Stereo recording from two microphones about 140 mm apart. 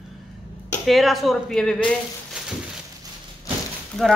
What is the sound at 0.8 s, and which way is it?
Speech, centre (ahead or behind).